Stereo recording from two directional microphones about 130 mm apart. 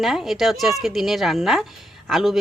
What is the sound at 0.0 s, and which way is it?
Speech, centre (ahead or behind).